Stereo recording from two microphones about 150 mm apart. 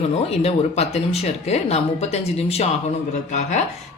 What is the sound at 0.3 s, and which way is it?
Speech, 45° left (ahead or behind).